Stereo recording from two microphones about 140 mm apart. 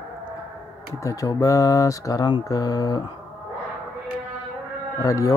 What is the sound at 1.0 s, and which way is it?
Speech, 25° left (ahead or behind).